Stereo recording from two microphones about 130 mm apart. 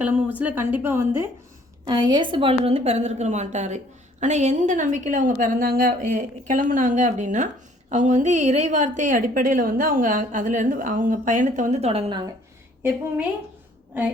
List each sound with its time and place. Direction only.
0.0 s a woman's voice: 15° right (ahead or behind)
1.9 s a woman's voice: 30° right (ahead or behind); by 12.1 s 50° right (ahead or behind)